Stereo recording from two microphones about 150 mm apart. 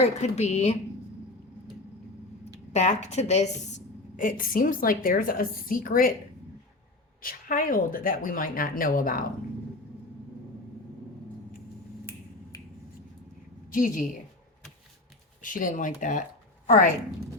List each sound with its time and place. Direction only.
0.0 s a woman's voice: 50° left (ahead or behind)
2.7 s a woman's voice: 50° left (ahead or behind); by 6.1 s 70° left (ahead or behind)
7.2 s a woman's voice: 70° left (ahead or behind)
13.7 s a woman's voice: 60° left (ahead or behind)
15.4 s speech: 65° left (ahead or behind)